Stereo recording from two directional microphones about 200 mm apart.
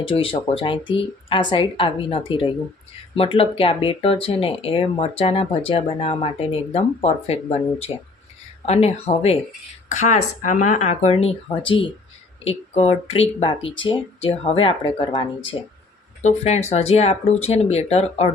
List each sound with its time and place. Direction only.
0.0 s speech: 25° left (ahead or behind)